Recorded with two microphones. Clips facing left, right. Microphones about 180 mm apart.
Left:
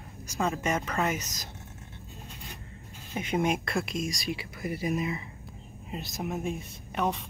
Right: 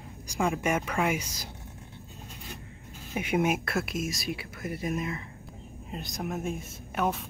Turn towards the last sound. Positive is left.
turn(degrees=-5)  # may be behind; listen again after turning